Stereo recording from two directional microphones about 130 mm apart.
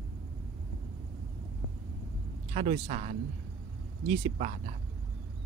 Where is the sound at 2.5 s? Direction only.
45° right (ahead or behind).